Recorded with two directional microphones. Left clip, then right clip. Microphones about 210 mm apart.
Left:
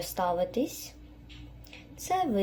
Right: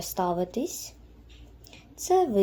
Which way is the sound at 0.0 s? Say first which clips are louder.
Right 1 dB; 50° right (ahead or behind).